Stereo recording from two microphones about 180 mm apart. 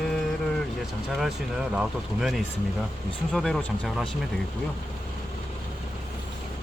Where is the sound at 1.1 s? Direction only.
5° right (ahead or behind).